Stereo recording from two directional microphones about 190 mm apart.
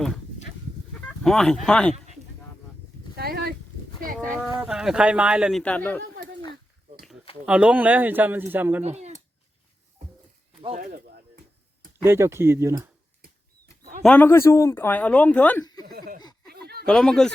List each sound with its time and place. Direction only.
1.0 s speech: 5° left (ahead or behind)
3.2 s a sound: 55° right (ahead or behind)
4.0 s speech: 45° right (ahead or behind)
4.6 s speech: 5° right (ahead or behind)
7.4 s speech: 5° right (ahead or behind)
8.8 s a sound: 35° right (ahead or behind)
10.8 s speech: 45° right (ahead or behind)
12.0 s speech: 15° right (ahead or behind)
14.0 s speech: 10° left (ahead or behind)
15.6 s a sound: 20° left (ahead or behind)
15.9 s laughter: 50° right (ahead or behind)
16.5 s a sound: 55° right (ahead or behind)
16.8 s speech: 5° left (ahead or behind)